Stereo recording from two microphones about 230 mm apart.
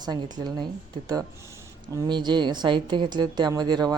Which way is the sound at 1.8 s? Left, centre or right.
Centre.